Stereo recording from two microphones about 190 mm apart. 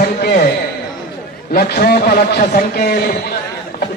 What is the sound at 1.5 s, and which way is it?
A man's voice, 55° left (ahead or behind).